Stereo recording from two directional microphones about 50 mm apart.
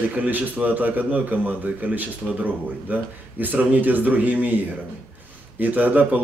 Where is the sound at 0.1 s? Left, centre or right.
Right.